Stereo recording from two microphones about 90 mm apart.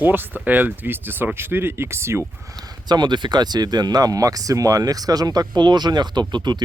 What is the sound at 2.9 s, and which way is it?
Speech, 55° right (ahead or behind).